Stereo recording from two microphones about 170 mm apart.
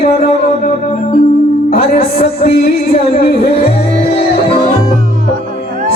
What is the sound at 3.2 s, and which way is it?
Speech, 60° left (ahead or behind).